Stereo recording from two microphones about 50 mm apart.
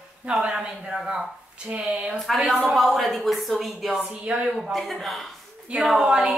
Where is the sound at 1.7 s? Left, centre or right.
Right.